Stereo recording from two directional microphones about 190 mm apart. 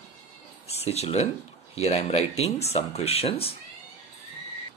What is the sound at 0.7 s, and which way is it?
Speech, 35° left (ahead or behind).